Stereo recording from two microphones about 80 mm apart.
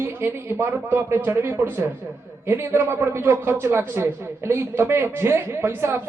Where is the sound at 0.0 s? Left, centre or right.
Right.